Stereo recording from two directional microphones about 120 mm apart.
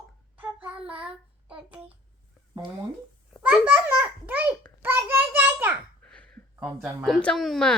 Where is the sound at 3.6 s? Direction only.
15° right (ahead or behind).